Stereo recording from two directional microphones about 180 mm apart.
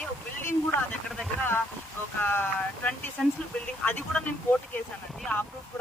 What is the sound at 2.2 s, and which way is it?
Speech, 10° left (ahead or behind).